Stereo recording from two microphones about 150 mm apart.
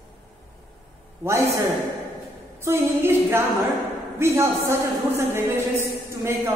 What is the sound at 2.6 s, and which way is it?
A man's voice, 15° right (ahead or behind).